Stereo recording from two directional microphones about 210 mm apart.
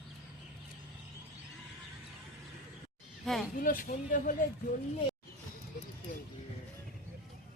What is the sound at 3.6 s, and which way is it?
Speech, 40° left (ahead or behind).